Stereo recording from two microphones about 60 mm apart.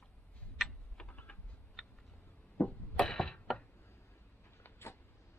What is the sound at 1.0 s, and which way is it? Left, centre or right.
Typing, left.